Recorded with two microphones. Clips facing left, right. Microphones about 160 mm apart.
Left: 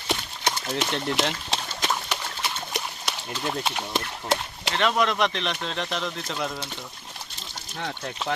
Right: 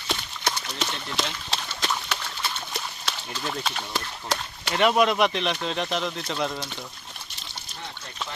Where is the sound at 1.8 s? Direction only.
15° left (ahead or behind).